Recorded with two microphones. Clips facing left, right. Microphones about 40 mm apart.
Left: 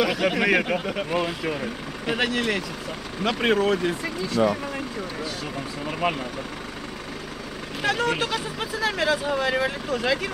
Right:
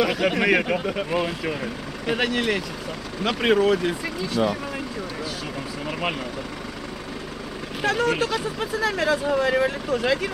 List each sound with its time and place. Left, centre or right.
0.0 s speech: centre
5.9 s speech: centre
7.8 s speech: centre
9.3 s speech: centre
9.8 s speech: centre